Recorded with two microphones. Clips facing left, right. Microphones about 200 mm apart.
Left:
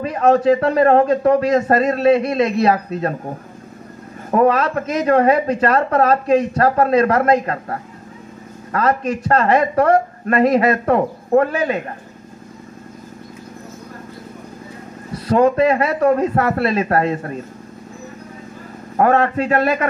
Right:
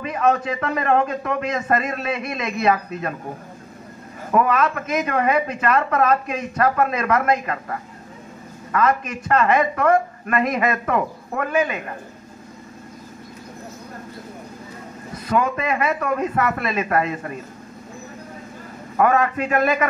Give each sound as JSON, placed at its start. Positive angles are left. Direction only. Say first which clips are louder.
{"t": 0.0, "sound": "speech", "louder": "left 6 dB", "side_deg": 35}
{"t": 4.3, "sound": "speech", "louder": "left 4 dB", "side_deg": 35}
{"t": 15.2, "sound": "speech", "louder": "left 8 dB", "side_deg": 35}
{"t": 18.9, "sound": "speech", "louder": "left 3 dB", "side_deg": 35}